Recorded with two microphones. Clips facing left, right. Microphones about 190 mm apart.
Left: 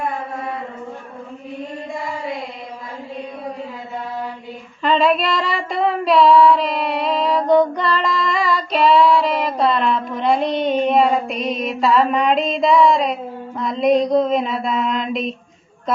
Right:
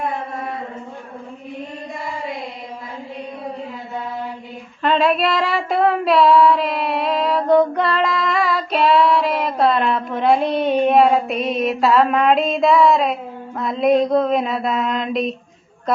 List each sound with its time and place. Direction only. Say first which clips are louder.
4.8 s female singing: even; centre (ahead or behind)
8.2 s child singing: even; 5° right (ahead or behind)
10.2 s female singing: right 3 dB; 5° right (ahead or behind)